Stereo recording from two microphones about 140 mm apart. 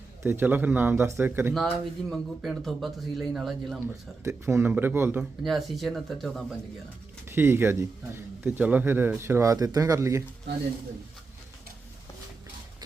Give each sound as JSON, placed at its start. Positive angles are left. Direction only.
{"t": 0.2, "sound": "a man's voice", "side_deg": -15}
{"t": 1.5, "sound": "speech", "side_deg": 0}
{"t": 4.2, "sound": "a man's voice", "side_deg": -20}
{"t": 5.4, "sound": "speech", "side_deg": 0}
{"t": 7.3, "sound": "a man's voice", "side_deg": -15}